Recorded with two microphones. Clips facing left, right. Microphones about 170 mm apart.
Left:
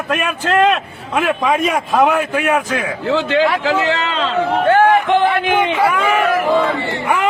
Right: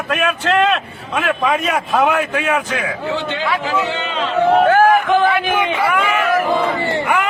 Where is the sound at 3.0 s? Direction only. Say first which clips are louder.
Left 9 dB; 90° left.